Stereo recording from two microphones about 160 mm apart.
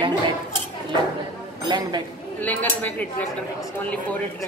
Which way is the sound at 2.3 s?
10° left (ahead or behind).